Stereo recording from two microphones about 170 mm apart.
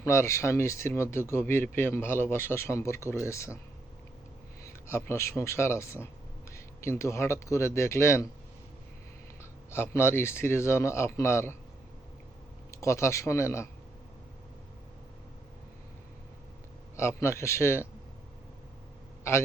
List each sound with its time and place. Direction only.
0.0 s a man's voice: 15° left (ahead or behind)
4.6 s a man's voice: 15° left (ahead or behind)
9.4 s a man's voice: 15° left (ahead or behind)
12.7 s a man's voice: 15° left (ahead or behind)
17.0 s a man's voice: 15° left (ahead or behind)